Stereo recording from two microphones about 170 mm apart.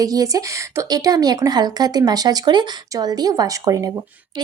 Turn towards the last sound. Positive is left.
turn(degrees=-20)  # may be behind; listen again after turning